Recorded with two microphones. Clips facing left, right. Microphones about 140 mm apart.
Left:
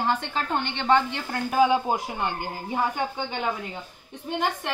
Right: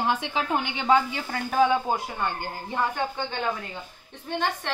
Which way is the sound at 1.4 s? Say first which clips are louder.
Left 1 dB; 10° left (ahead or behind).